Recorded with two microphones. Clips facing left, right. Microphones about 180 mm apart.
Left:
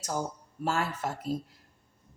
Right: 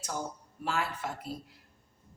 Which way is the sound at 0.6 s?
45° left (ahead or behind).